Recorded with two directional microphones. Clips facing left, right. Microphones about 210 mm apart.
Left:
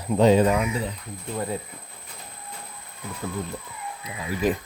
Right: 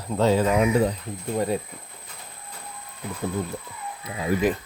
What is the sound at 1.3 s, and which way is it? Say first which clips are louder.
Speech: right 4 dB; 20° right (ahead or behind).